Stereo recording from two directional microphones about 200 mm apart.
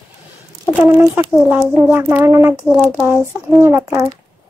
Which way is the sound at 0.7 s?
10° right (ahead or behind).